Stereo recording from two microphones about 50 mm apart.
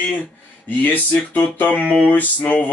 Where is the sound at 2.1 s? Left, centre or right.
Left.